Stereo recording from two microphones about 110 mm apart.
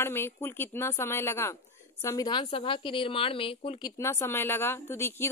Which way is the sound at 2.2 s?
50° left (ahead or behind).